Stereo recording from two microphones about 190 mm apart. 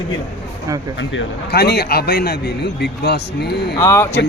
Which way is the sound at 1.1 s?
60° left (ahead or behind).